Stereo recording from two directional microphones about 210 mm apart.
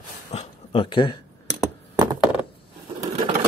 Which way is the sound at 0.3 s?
30° left (ahead or behind).